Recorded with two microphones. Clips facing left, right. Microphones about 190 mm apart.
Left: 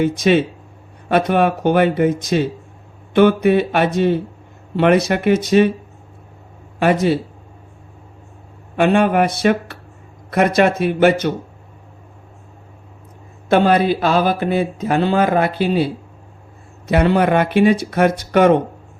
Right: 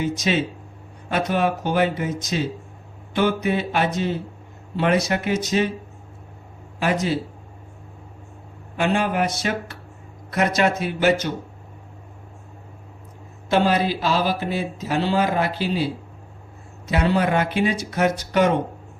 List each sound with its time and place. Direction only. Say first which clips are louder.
0.0 s speech: left 7 dB; 55° left (ahead or behind)
6.7 s speech: left 7 dB; 60° left (ahead or behind)
8.7 s speech: left 7 dB; 60° left (ahead or behind)
13.5 s speech: left 6 dB; 55° left (ahead or behind)